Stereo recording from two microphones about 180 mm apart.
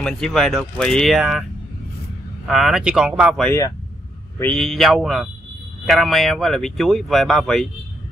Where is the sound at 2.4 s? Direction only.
Centre (ahead or behind).